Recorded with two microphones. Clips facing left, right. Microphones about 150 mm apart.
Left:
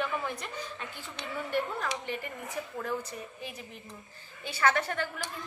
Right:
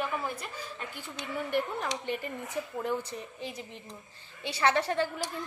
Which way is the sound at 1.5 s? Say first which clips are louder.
Even; 20° right (ahead or behind).